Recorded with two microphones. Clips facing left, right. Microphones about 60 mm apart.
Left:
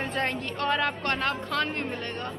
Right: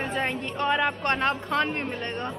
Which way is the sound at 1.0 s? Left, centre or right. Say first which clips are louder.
Right 3 dB; right.